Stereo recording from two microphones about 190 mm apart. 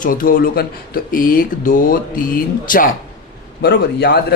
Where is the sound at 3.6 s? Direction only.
60° left (ahead or behind).